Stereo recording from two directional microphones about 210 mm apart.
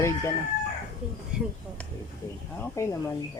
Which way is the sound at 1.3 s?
5° right (ahead or behind).